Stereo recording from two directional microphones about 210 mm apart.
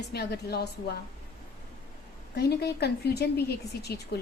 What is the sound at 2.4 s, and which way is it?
A woman's voice, 50° left (ahead or behind).